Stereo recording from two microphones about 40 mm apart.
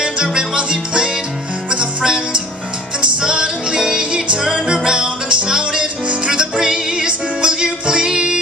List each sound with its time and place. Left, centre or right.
0.0 s music: centre